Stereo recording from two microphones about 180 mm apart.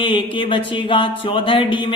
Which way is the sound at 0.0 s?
30° left (ahead or behind).